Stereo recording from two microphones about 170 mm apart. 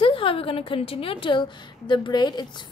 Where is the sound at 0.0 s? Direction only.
30° left (ahead or behind).